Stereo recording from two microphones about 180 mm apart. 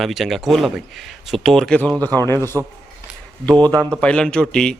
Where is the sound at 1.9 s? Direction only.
20° right (ahead or behind).